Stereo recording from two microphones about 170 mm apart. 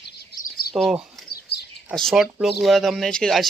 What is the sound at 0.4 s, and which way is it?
Bird, 65° left (ahead or behind).